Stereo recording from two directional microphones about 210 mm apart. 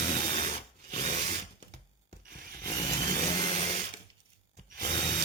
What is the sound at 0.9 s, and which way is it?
Drill, 35° right (ahead or behind).